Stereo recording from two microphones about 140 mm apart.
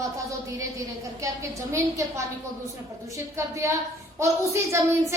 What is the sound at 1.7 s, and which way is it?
A woman's voice, 20° right (ahead or behind).